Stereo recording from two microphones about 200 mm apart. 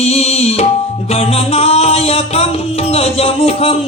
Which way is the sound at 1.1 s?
30° left (ahead or behind).